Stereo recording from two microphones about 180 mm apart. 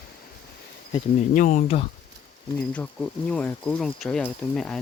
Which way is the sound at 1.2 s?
40° left (ahead or behind).